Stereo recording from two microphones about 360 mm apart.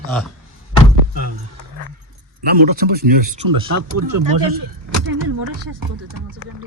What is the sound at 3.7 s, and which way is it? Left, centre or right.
Speech, right.